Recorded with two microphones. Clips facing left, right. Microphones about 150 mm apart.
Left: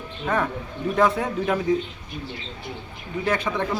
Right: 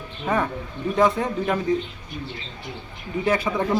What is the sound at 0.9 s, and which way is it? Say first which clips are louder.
Speech: right 1 dB; centre (ahead or behind).